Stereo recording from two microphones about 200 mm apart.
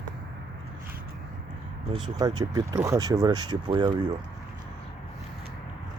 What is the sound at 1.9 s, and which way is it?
Speech, 25° right (ahead or behind).